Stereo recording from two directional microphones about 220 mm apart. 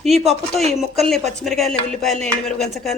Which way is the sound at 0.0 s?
Centre (ahead or behind).